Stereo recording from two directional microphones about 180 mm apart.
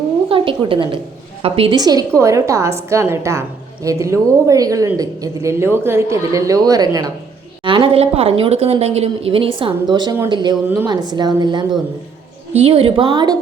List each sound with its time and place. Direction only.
0.3 s a woman's voice: 30° right (ahead or behind)